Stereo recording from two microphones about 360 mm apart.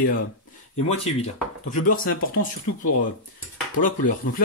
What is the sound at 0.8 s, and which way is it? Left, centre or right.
Speech, centre.